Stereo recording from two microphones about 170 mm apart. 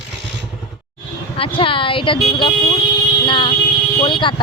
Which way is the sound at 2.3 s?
25° left (ahead or behind).